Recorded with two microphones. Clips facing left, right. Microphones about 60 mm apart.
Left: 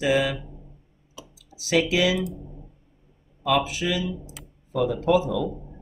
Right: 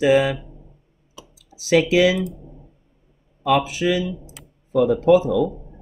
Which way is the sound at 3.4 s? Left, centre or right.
Right.